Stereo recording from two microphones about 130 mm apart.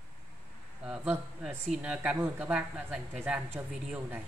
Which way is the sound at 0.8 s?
5° right (ahead or behind).